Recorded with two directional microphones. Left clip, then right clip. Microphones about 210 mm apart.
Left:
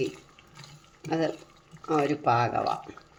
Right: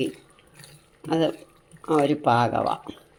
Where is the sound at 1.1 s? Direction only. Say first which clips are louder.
Right 5 dB; 35° right (ahead or behind).